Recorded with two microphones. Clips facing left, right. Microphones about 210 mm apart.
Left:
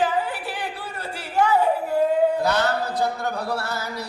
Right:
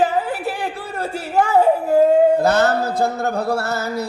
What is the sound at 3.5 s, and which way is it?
Music, 45° right (ahead or behind).